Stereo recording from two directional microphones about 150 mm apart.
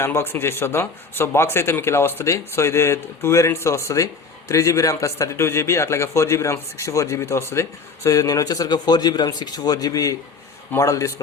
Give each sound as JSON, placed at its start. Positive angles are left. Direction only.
{"t": 0.0, "sound": "speech", "side_deg": 15}